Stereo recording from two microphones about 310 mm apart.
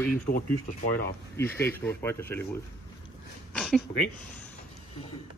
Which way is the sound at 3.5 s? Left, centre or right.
Centre.